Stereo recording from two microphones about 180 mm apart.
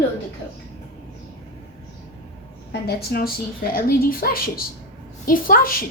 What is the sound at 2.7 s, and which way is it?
A woman's voice, 60° left (ahead or behind).